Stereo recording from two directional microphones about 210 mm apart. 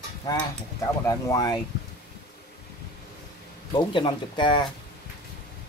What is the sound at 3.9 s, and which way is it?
Speech, 20° left (ahead or behind).